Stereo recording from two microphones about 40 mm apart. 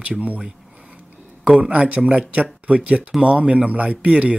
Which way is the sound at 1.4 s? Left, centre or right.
Right.